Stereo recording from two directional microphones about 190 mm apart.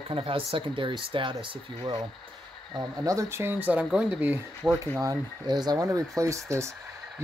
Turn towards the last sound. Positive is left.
turn(degrees=-15)  # may be behind; listen again after turning